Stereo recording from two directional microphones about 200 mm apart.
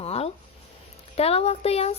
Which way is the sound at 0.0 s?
30° left (ahead or behind).